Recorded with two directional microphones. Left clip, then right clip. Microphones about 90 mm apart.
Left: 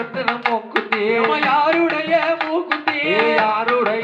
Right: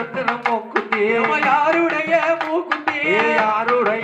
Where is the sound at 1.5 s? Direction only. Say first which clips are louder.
Even; 10° left (ahead or behind).